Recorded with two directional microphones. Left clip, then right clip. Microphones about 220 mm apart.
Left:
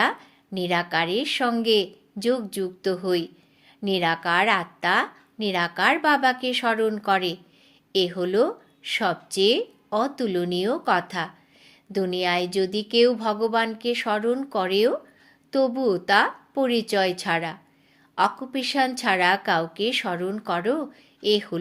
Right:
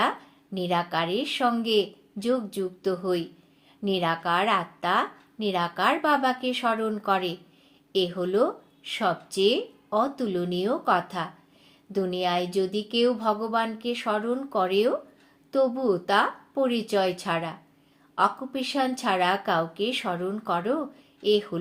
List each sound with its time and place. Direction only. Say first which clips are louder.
0.5 s a woman's voice: left 2 dB; 30° left (ahead or behind)